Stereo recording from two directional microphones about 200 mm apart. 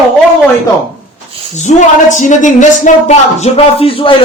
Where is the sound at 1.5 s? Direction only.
35° left (ahead or behind).